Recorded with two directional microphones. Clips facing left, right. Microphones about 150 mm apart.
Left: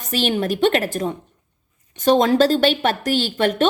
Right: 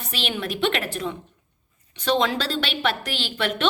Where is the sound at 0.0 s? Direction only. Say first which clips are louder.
Left 8 dB; 45° left (ahead or behind).